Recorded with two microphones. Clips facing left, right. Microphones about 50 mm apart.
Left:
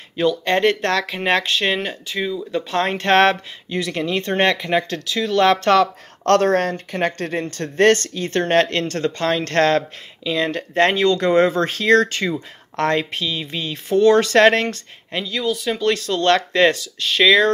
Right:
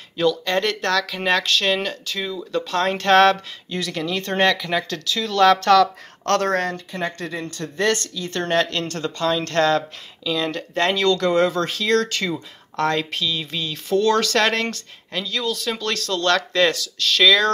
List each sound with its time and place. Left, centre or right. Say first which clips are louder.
0.5 s speech: left 3 dB; left
6.9 s speech: left 5 dB; left
11.0 s speech: even; left
15.2 s speech: left 3 dB; centre